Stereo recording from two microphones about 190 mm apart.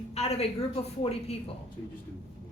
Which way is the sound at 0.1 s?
35° left (ahead or behind).